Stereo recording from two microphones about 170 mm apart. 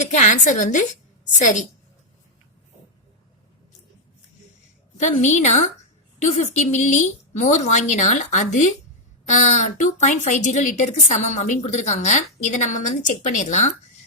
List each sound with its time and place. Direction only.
0.0 s a woman's voice: 45° left (ahead or behind)
4.9 s a woman's voice: 40° left (ahead or behind)